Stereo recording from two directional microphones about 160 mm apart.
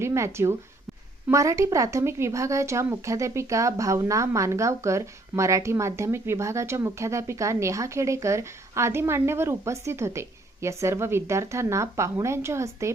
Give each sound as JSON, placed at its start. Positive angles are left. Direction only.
{"t": 0.0, "sound": "speech", "side_deg": -15}